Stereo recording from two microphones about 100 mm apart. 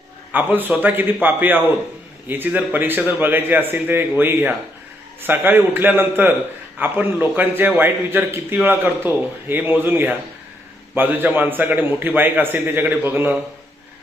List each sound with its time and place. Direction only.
0.3 s a man's voice: 20° right (ahead or behind)